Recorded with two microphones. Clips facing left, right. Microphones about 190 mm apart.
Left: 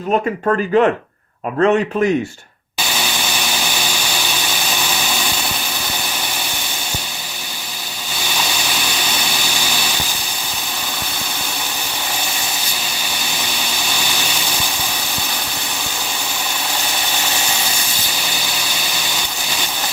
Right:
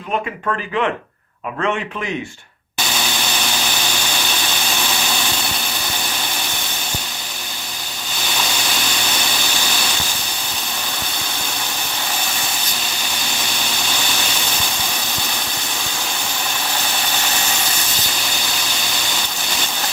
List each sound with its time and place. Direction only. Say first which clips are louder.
0.4 s a man's voice: left 8 dB; 40° left (ahead or behind)